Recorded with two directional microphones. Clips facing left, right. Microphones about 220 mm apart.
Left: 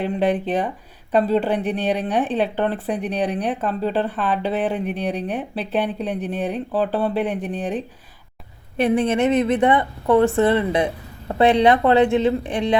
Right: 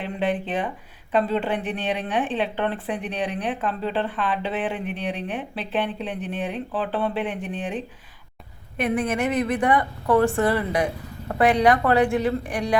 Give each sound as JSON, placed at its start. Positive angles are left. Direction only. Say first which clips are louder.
{"t": 0.0, "sound": "a woman's voice", "louder": "left 5 dB", "side_deg": 40}
{"t": 8.8, "sound": "a woman's voice", "louder": "left 5 dB", "side_deg": 25}